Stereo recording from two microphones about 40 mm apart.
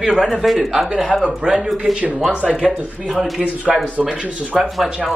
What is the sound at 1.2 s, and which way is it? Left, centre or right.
Speech, centre.